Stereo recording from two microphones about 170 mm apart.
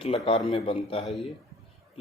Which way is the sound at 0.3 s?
35° left (ahead or behind).